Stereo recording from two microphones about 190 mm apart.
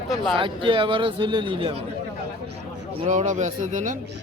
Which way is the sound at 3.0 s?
40° right (ahead or behind).